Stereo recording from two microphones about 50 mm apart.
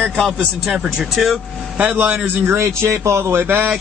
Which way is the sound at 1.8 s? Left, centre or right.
Right.